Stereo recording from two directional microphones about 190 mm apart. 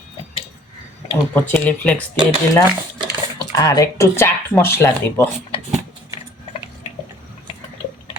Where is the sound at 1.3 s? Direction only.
10° left (ahead or behind).